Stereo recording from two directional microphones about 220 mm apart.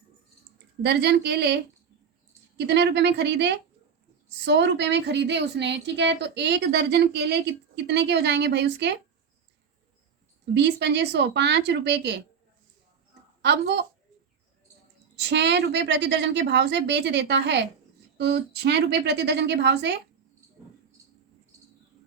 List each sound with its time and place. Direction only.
0.8 s a woman's voice: 50° right (ahead or behind)
2.6 s a woman's voice: 50° right (ahead or behind)
10.5 s a woman's voice: 50° right (ahead or behind)
13.4 s a woman's voice: 50° right (ahead or behind)
15.1 s a woman's voice: 50° right (ahead or behind)